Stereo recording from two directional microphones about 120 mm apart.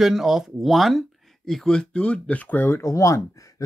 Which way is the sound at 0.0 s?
Centre (ahead or behind).